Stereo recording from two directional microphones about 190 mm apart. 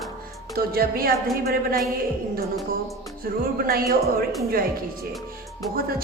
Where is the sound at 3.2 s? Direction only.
50° right (ahead or behind).